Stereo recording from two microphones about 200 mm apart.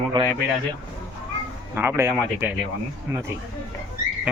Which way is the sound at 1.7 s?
10° right (ahead or behind).